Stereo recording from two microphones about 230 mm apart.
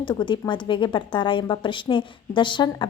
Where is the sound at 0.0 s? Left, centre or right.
Centre.